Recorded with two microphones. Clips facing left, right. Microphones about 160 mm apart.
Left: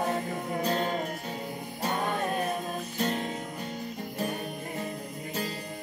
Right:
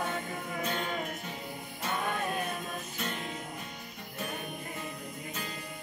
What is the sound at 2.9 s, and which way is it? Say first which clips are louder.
Music: left 9 dB; 35° left (ahead or behind).